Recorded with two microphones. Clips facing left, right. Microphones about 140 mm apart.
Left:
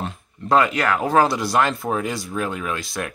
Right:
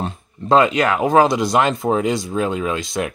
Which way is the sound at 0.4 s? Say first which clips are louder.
Right 4 dB; 20° right (ahead or behind).